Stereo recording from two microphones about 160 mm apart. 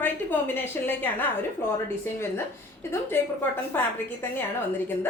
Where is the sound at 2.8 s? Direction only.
15° left (ahead or behind).